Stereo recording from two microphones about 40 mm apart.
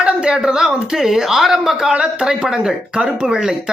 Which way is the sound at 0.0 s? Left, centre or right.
Centre.